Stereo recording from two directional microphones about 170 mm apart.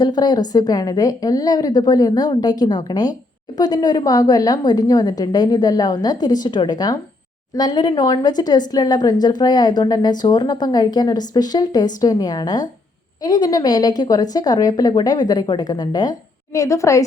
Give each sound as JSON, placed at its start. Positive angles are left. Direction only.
{"t": 0.0, "sound": "a woman's voice", "side_deg": 25}